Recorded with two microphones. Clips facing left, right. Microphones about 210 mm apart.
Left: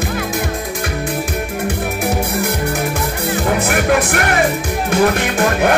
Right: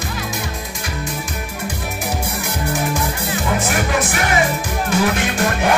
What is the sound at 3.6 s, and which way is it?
Music, 60° left (ahead or behind).